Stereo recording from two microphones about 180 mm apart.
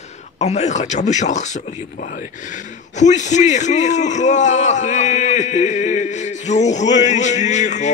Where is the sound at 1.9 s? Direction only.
45° left (ahead or behind).